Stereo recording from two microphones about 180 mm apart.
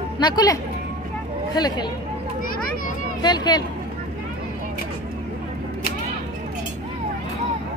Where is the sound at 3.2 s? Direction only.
25° left (ahead or behind).